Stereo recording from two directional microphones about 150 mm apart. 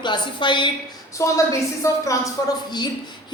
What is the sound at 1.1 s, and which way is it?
A woman's voice, 20° left (ahead or behind).